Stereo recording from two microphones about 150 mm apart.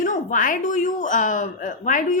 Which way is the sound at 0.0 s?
60° left (ahead or behind).